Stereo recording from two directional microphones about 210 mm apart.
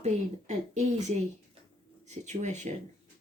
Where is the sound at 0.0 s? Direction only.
35° right (ahead or behind).